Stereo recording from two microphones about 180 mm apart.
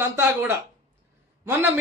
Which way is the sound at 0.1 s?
10° right (ahead or behind).